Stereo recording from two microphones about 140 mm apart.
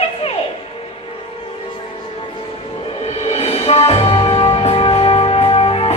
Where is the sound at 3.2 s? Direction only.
50° left (ahead or behind).